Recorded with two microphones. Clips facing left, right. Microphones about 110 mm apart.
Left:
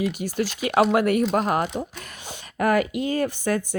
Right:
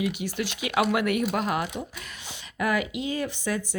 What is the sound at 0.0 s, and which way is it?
Speech, 40° left (ahead or behind).